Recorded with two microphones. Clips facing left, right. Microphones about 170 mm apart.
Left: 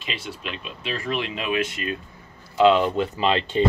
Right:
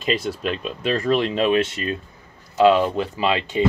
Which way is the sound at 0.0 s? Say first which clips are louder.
Right 10 dB; 40° right (ahead or behind).